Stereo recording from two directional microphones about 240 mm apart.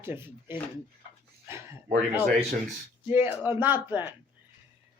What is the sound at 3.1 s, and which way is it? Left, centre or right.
Speech, centre.